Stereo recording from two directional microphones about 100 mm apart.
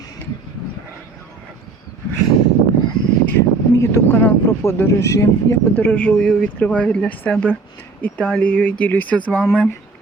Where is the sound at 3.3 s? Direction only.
30° left (ahead or behind).